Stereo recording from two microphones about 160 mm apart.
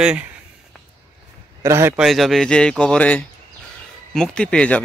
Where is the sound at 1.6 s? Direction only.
15° right (ahead or behind).